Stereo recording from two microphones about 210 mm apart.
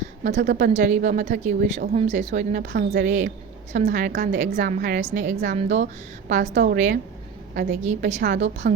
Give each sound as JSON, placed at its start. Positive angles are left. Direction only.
{"t": 0.2, "sound": "a woman's voice", "side_deg": -35}